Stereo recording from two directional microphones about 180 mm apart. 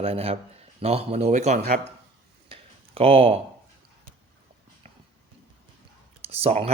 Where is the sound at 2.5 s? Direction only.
35° right (ahead or behind).